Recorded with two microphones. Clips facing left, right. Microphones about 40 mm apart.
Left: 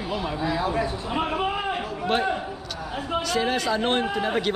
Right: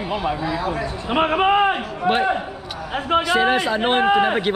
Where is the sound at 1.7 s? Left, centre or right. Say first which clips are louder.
Right 5 dB; right.